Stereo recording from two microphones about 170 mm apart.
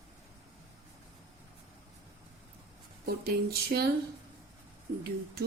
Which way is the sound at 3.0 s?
65° right (ahead or behind).